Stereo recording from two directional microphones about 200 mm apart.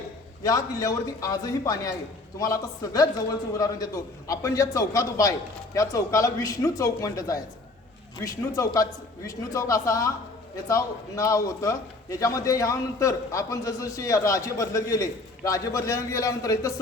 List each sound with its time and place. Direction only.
0.4 s a man's voice: 15° left (ahead or behind)